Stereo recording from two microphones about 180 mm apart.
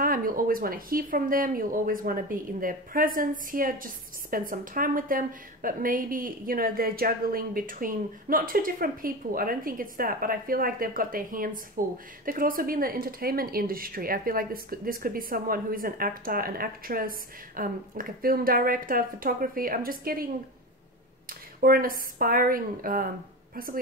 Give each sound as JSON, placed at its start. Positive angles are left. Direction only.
{"t": 0.0, "sound": "speech", "side_deg": -50}
{"t": 21.3, "sound": "a woman's voice", "side_deg": -55}